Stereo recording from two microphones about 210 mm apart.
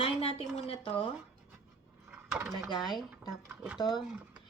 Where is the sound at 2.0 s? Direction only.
5° right (ahead or behind).